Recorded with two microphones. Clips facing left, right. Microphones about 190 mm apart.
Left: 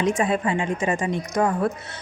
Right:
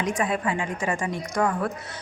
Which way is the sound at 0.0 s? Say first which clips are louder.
Left 4 dB; 25° left (ahead or behind).